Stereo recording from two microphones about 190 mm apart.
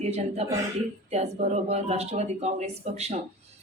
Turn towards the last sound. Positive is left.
turn(degrees=-35)  # may be behind; listen again after turning